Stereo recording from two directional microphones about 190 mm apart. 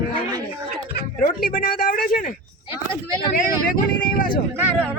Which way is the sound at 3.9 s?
50° left (ahead or behind).